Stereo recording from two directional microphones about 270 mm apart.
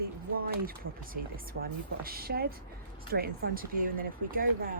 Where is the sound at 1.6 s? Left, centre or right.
Right.